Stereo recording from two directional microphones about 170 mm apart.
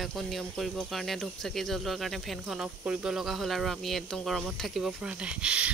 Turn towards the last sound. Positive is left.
turn(degrees=-5)  # may be behind; listen again after turning